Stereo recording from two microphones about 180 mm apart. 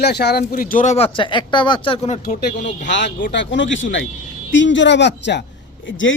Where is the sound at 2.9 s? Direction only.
90° left.